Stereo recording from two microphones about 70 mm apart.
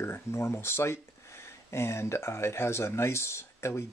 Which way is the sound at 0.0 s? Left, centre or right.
Left.